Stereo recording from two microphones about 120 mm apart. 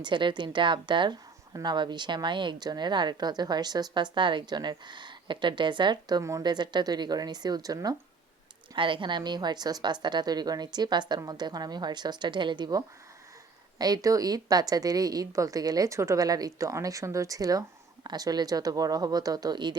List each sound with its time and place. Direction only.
0.0 s speech: 40° right (ahead or behind)
8.7 s speech: 45° right (ahead or behind)